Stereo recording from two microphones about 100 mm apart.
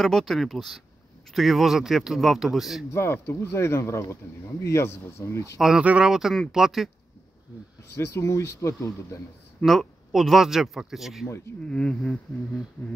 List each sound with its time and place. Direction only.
0.0 s speech: centre (ahead or behind)
2.9 s speech: 25° left (ahead or behind)
5.6 s speech: 5° right (ahead or behind)
7.9 s speech: 25° left (ahead or behind)
9.7 s speech: centre (ahead or behind)
11.6 s speech: 10° left (ahead or behind)